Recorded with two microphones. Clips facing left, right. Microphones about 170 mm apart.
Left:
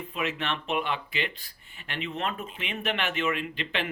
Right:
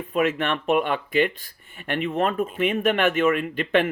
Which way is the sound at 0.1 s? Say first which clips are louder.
Right 10 dB; 50° right (ahead or behind).